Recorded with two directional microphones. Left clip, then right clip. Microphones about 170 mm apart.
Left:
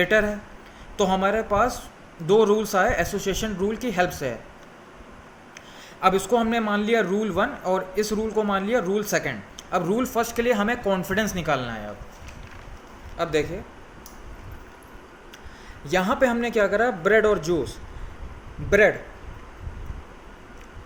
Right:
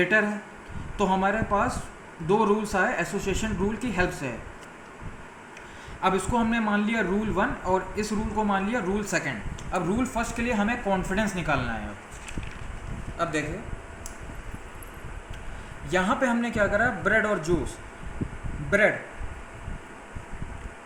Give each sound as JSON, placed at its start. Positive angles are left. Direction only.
{"t": 0.0, "sound": "speech", "side_deg": 55}
{"t": 6.0, "sound": "speech", "side_deg": 55}
{"t": 15.9, "sound": "speech", "side_deg": 55}